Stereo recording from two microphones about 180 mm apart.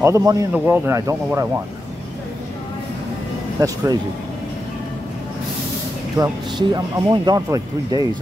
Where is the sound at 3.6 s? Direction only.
20° right (ahead or behind).